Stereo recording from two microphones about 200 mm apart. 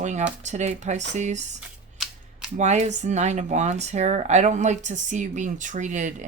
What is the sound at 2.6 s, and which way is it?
Speech, 35° right (ahead or behind).